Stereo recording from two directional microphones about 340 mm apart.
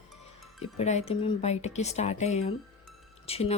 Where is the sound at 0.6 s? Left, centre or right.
Centre.